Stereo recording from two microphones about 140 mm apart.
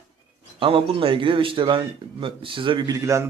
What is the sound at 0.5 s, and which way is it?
A man's voice, 40° right (ahead or behind).